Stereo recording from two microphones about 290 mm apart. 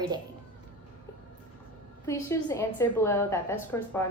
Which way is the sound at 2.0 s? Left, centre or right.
Centre.